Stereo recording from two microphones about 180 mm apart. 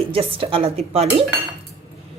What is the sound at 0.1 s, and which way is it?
Speech, 30° right (ahead or behind).